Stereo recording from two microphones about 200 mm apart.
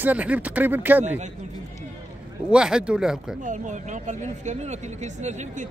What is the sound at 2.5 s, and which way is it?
Speech, 5° right (ahead or behind).